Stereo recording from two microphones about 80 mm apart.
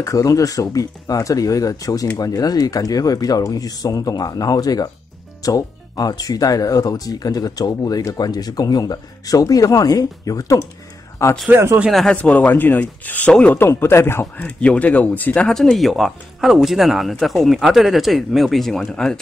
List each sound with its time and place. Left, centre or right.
0.0 s speech: left
11.2 s a man's voice: left
12.1 s speech: centre
14.4 s speech: centre
15.4 s speech: centre